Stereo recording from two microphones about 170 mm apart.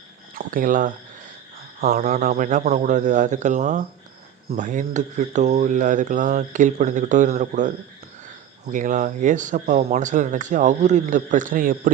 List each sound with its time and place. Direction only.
0.3 s speech: 55° right (ahead or behind)